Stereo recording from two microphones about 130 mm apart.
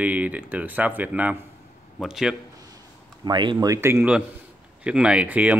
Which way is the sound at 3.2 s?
35° right (ahead or behind).